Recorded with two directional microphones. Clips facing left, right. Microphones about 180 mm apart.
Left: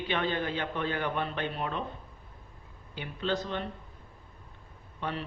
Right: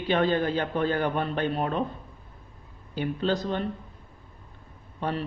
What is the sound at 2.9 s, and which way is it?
Speech, 40° right (ahead or behind).